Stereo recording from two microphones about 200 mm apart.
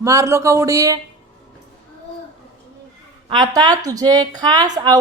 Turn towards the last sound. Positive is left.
turn(degrees=-20)  # may be behind; listen again after turning